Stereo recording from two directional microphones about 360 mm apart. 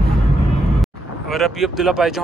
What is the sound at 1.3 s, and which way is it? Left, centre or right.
Speech, centre.